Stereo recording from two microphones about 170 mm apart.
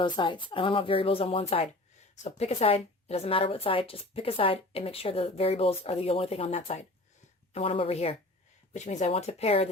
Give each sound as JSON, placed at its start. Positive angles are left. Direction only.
{"t": 0.0, "sound": "a woman's voice", "side_deg": 30}